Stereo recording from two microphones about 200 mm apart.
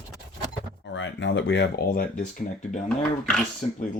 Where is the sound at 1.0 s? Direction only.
65° left (ahead or behind); by 2.2 s 50° left (ahead or behind).